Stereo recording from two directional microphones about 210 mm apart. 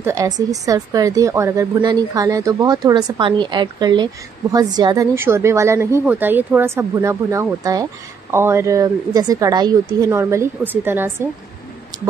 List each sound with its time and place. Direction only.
0.0 s a woman's voice: 15° right (ahead or behind)